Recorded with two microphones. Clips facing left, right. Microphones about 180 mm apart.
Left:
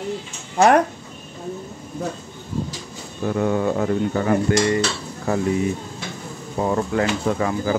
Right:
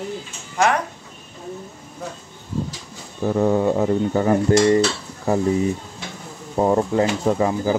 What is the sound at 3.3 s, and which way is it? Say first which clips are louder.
Cutlery: right 3 dB; 30° right (ahead or behind).